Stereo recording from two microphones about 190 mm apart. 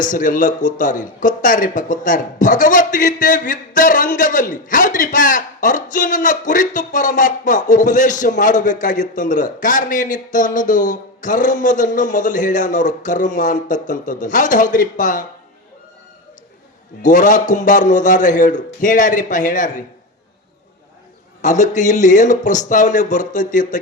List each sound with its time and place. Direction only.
0.0 s speech: 45° left (ahead or behind)
17.0 s speech: 40° left (ahead or behind)
21.4 s speech: 40° left (ahead or behind)